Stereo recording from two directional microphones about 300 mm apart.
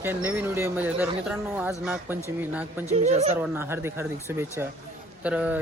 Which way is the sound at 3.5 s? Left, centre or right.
Centre.